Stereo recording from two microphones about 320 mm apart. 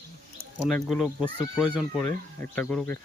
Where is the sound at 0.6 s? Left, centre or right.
Centre.